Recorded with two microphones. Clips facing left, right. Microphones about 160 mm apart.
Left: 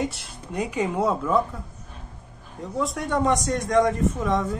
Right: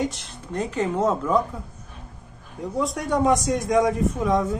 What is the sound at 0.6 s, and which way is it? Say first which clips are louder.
Speech: right 1 dB; 10° left (ahead or behind).